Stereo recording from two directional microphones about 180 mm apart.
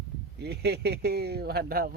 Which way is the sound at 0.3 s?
65° right (ahead or behind).